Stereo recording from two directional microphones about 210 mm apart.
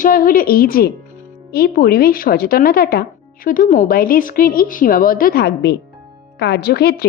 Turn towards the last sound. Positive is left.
turn(degrees=50)  # may be behind; listen again after turning